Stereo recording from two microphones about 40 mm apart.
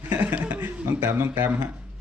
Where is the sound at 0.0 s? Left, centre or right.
Right.